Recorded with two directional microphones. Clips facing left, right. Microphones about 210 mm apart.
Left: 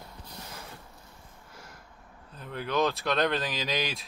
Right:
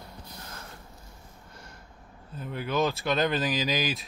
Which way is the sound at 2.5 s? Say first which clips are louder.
Even; 5° right (ahead or behind).